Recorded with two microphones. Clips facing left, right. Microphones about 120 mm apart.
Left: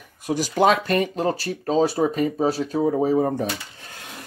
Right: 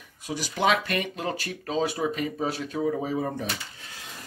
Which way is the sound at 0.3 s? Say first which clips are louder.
Left 6 dB; 45° left (ahead or behind).